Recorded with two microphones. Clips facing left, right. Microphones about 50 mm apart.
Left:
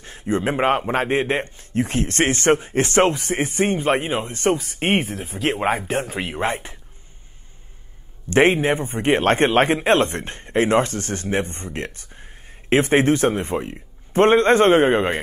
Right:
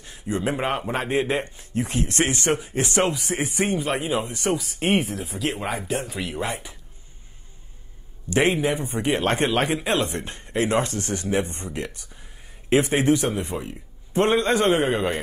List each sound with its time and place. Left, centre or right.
0.0 s speech: left
8.3 s speech: left